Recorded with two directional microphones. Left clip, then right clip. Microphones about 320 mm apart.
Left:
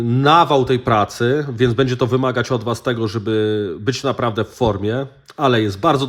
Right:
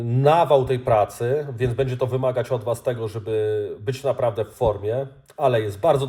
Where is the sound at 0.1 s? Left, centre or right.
Left.